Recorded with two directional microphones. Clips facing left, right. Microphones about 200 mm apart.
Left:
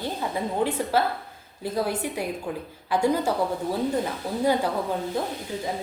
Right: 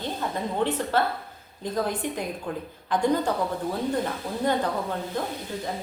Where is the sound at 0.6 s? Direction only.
10° left (ahead or behind).